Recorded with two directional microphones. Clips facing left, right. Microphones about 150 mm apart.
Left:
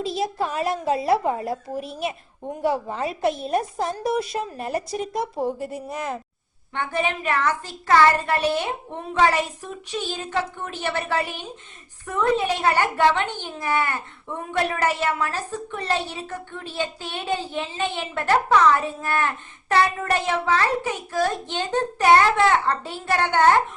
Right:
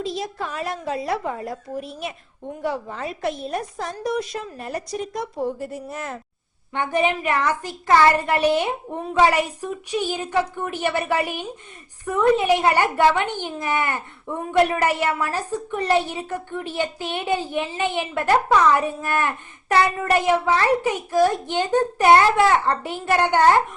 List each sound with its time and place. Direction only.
0.2 s a woman's voice: 30° left (ahead or behind)
1.7 s a child's voice: centre (ahead or behind)
2.6 s a woman's voice: 30° left (ahead or behind)
3.2 s a child's voice: centre (ahead or behind)
3.5 s a woman's voice: 30° left (ahead or behind)
4.0 s a child's voice: 5° left (ahead or behind)
4.3 s a woman's voice: 30° left (ahead or behind)
5.9 s a child's voice: centre (ahead or behind)
6.7 s a child's voice: 15° right (ahead or behind)